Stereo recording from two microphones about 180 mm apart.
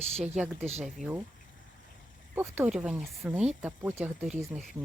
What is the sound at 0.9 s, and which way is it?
Speech, centre (ahead or behind).